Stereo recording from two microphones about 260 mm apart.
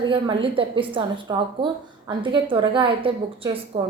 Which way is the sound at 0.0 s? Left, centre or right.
Centre.